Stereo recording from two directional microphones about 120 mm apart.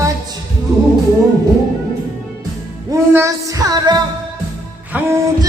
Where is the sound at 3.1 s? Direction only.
25° right (ahead or behind).